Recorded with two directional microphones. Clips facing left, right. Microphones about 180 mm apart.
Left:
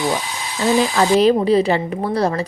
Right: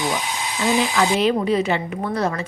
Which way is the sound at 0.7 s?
40° left (ahead or behind).